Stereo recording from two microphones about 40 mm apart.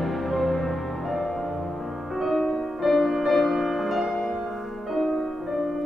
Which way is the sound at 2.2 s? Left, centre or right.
Centre.